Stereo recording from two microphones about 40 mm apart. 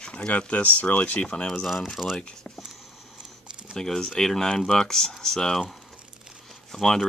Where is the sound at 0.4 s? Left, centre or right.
Left.